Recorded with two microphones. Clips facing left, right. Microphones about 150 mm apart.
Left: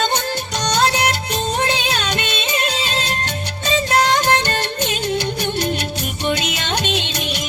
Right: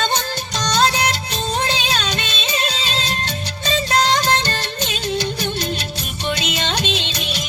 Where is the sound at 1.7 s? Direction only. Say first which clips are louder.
Left 1 dB; 60° left (ahead or behind).